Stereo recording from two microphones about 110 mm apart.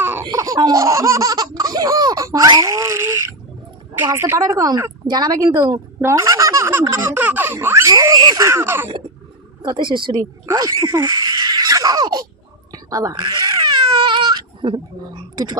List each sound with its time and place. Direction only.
0.0 s laughter: 20° right (ahead or behind)
0.3 s laughter: 30° right (ahead or behind)
2.6 s a sound: 30° right (ahead or behind)
4.1 s a woman's voice: 25° right (ahead or behind)
9.6 s speech: 45° right (ahead or behind)
10.4 s speech: 30° right (ahead or behind)
12.7 s a sound: 30° right (ahead or behind)